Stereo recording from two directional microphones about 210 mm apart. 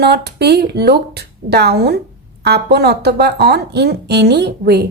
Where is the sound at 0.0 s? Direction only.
50° right (ahead or behind).